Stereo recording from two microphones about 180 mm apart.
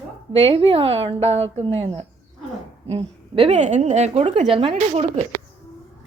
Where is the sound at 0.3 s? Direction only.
30° right (ahead or behind).